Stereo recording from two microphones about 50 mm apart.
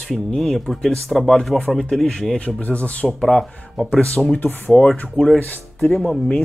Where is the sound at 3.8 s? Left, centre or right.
Centre.